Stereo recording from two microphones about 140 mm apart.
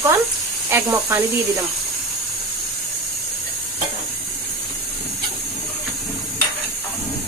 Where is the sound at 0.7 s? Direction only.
20° right (ahead or behind).